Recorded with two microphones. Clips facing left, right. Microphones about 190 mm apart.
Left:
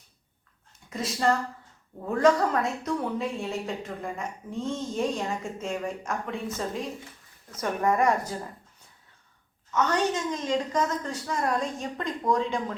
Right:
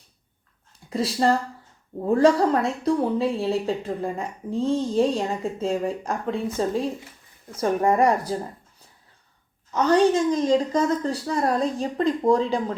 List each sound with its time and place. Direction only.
0.9 s speech: 35° right (ahead or behind)
9.7 s speech: 35° right (ahead or behind)